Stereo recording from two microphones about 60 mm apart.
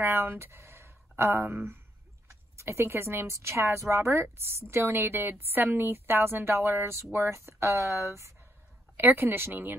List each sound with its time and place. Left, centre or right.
0.0 s speech: right
2.5 s a woman's voice: right
8.9 s speech: right